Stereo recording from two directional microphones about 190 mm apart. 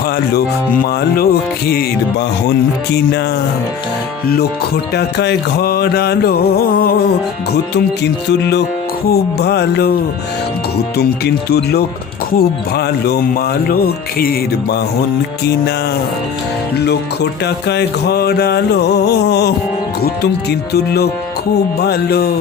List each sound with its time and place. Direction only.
0.3 s speech: 50° left (ahead or behind)
4.9 s music: 60° left (ahead or behind)
8.0 s music: 60° left (ahead or behind)
11.4 s music: 55° left (ahead or behind)
12.4 s speech: 55° left (ahead or behind)
16.7 s music: 60° left (ahead or behind)